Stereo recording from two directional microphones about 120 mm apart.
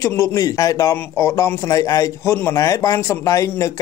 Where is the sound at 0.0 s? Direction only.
25° left (ahead or behind).